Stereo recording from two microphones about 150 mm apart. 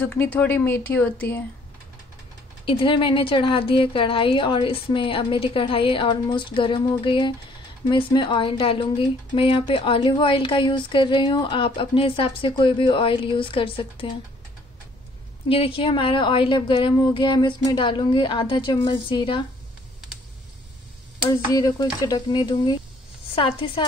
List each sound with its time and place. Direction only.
0.0 s speech: 10° left (ahead or behind)
2.6 s speech: 35° left (ahead or behind)
15.4 s speech: 35° left (ahead or behind)
21.3 s speech: 25° left (ahead or behind)